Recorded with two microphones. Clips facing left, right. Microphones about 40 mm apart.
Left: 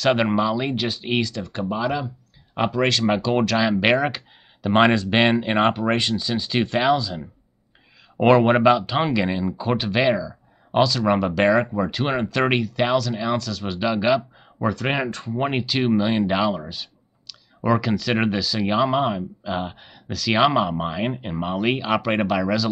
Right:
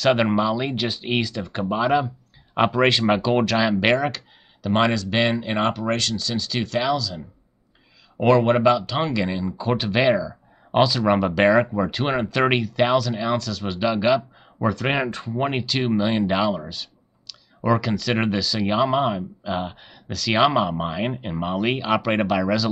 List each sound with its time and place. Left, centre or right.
0.0 s speech: centre
1.4 s speech: centre
4.6 s speech: left; by 15.3 s centre
15.3 s speech: centre